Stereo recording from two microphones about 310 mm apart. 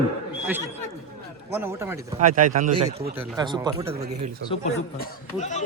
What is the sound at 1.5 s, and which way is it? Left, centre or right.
Speech, centre.